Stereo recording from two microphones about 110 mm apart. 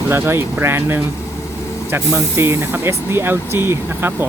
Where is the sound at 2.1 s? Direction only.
25° right (ahead or behind).